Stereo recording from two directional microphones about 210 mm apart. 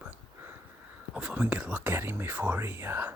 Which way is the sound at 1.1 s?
5° right (ahead or behind).